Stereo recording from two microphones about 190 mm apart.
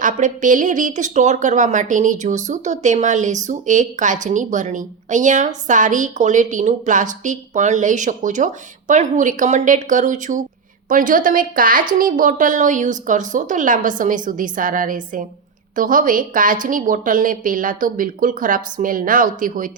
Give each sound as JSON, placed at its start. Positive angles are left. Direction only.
{"t": 0.0, "sound": "a woman's voice", "side_deg": -45}